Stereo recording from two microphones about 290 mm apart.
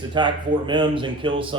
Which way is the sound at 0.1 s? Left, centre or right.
Centre.